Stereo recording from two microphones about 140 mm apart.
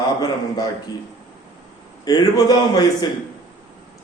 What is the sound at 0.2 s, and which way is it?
Speech, 25° left (ahead or behind).